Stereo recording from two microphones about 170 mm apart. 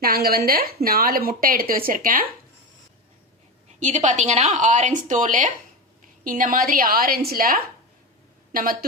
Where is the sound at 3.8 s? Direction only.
45° right (ahead or behind).